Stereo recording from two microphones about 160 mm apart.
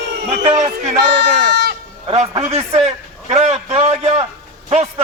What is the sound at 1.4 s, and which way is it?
Speech, 90° right.